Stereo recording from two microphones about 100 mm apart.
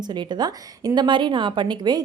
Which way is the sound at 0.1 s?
45° right (ahead or behind).